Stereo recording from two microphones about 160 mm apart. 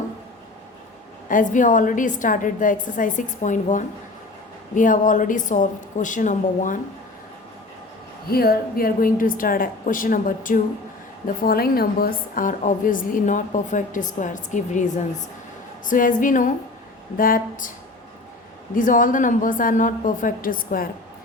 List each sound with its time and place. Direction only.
1.3 s a woman's voice: 55° left (ahead or behind)
8.3 s a woman's voice: 70° left (ahead or behind)
11.4 s a woman's voice: 70° left (ahead or behind); by 14.8 s 50° left (ahead or behind)
15.9 s a woman's voice: 55° left (ahead or behind)
18.7 s a woman's voice: 55° left (ahead or behind)